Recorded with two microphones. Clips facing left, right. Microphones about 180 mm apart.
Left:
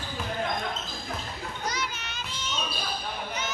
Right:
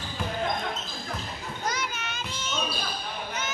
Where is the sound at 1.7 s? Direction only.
50° right (ahead or behind).